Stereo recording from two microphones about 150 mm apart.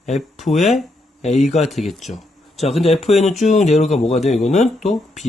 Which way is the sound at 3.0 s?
45° left (ahead or behind).